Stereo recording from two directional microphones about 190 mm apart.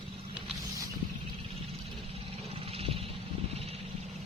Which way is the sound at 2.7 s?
30° right (ahead or behind).